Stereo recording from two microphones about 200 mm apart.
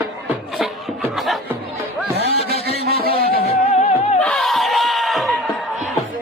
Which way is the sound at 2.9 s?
50° right (ahead or behind).